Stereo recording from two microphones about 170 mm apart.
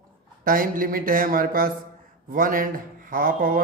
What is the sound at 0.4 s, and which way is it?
A man's voice, 55° right (ahead or behind).